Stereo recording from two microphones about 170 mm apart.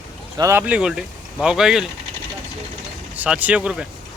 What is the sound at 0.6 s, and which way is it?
Speech, 5° right (ahead or behind).